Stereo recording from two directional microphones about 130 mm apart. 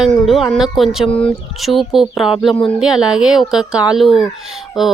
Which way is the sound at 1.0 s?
45° left (ahead or behind).